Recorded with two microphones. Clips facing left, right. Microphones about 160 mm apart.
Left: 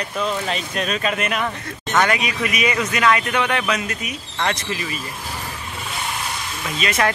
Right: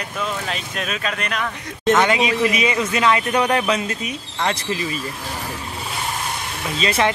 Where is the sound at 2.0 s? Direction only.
25° right (ahead or behind).